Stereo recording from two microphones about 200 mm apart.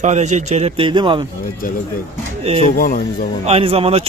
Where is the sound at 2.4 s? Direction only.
30° right (ahead or behind).